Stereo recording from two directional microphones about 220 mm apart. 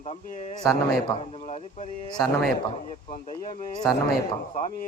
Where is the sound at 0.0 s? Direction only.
30° left (ahead or behind).